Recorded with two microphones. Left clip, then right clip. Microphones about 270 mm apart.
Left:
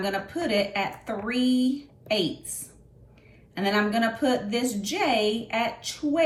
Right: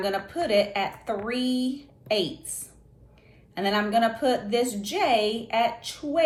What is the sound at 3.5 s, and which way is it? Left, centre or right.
Speech, centre.